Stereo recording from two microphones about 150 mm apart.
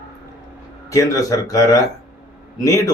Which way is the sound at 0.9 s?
20° left (ahead or behind).